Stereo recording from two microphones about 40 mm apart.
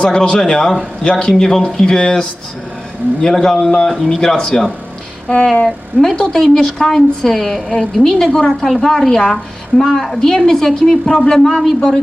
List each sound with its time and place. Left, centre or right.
0.0 s a woman's voice: centre